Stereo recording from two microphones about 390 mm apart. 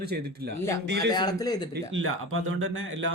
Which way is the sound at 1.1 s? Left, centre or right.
Centre.